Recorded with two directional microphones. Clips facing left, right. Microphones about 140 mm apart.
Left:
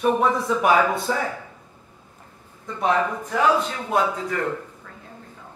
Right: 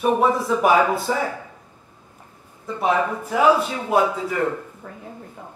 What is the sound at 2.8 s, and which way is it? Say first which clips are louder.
Speech: right 1 dB; 5° right (ahead or behind).